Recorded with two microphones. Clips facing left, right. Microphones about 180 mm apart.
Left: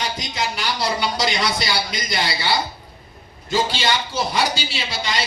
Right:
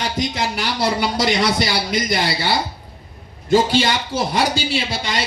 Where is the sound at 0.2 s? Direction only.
55° right (ahead or behind).